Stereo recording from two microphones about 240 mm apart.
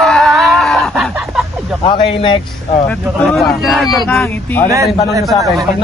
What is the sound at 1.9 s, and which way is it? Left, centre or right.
Speech, left.